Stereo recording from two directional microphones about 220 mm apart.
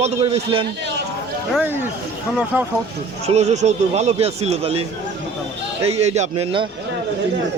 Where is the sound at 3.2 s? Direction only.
30° right (ahead or behind).